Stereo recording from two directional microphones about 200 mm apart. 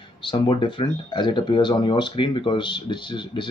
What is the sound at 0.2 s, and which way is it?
Speech, 25° left (ahead or behind).